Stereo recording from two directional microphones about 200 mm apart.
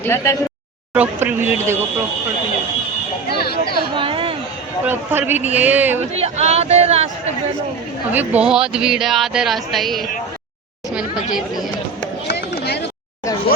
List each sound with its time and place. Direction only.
0.0 s speech: 10° left (ahead or behind)
0.9 s speech: 5° right (ahead or behind)
3.2 s a sound: 50° left (ahead or behind)
3.9 s chatter: 25° right (ahead or behind)
4.9 s speech: 10° right (ahead or behind)
6.1 s speech: 30° right (ahead or behind)
8.1 s speech: 10° right (ahead or behind)
12.3 s chop: 55° left (ahead or behind)